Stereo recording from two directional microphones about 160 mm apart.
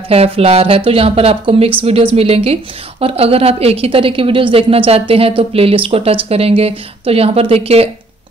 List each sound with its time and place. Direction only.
0.1 s a woman's voice: 40° right (ahead or behind)